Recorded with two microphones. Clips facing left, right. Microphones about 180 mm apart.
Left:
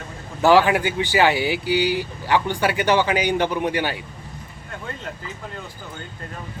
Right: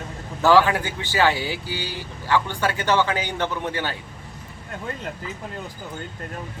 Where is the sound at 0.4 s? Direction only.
15° left (ahead or behind).